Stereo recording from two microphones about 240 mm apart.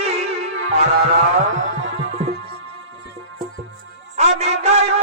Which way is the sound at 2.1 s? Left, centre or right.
Right.